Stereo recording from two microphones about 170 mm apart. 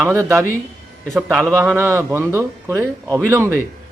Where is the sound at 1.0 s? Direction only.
5° left (ahead or behind).